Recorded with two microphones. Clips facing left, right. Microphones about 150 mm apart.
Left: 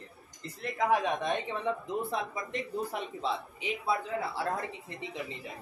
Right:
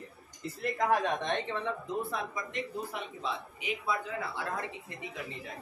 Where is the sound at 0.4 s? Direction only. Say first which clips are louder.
Right 1 dB; 5° right (ahead or behind); by 2.0 s 15° left (ahead or behind).